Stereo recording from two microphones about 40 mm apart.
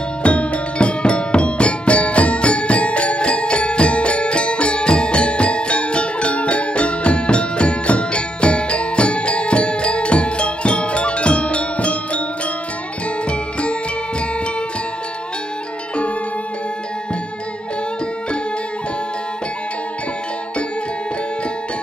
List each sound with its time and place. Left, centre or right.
0.2 s music: left
13.3 s music: left